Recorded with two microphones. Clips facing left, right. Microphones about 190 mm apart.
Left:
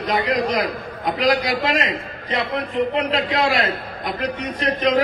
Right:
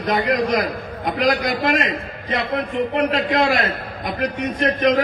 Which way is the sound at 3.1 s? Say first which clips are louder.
Right 2 dB; 50° right (ahead or behind).